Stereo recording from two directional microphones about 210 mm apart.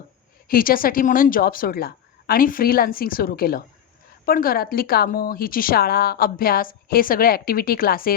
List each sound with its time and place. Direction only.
0.4 s speech: 45° left (ahead or behind)